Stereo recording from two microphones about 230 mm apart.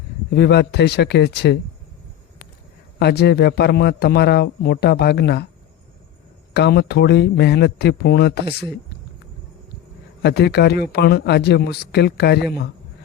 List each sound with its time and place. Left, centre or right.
0.3 s a man's voice: left
3.0 s a man's voice: left
6.5 s a man's voice: left
10.2 s a man's voice: left